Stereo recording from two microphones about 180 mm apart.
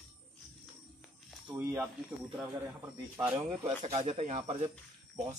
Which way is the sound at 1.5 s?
15° right (ahead or behind).